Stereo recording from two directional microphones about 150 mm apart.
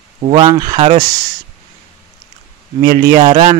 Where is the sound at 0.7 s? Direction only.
40° right (ahead or behind).